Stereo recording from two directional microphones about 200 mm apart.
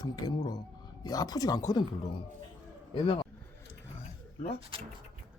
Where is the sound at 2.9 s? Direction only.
25° left (ahead or behind).